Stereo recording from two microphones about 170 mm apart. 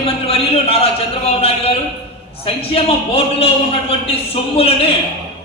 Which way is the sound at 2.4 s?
35° left (ahead or behind).